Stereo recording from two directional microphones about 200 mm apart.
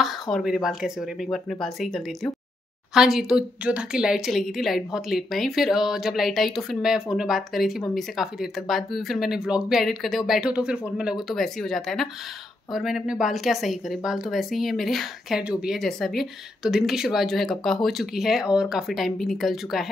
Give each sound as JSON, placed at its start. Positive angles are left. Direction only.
{"t": 0.0, "sound": "a woman's voice", "side_deg": 0}